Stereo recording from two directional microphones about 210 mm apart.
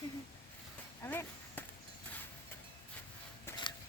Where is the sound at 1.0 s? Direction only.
10° left (ahead or behind).